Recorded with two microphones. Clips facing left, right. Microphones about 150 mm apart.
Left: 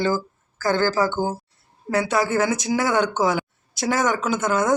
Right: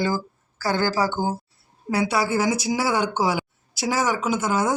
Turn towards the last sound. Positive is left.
turn(degrees=-10)  # may be behind; listen again after turning